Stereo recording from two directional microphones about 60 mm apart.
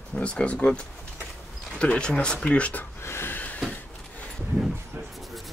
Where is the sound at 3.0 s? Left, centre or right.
Left.